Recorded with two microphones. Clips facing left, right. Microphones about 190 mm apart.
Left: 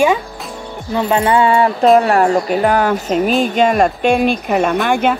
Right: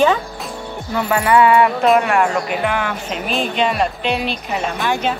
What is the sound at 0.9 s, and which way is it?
Music, 25° left (ahead or behind).